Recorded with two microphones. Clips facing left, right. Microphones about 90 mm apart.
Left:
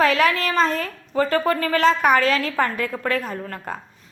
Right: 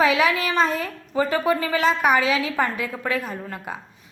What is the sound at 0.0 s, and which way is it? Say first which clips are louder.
A woman's voice: left 1 dB; 10° right (ahead or behind).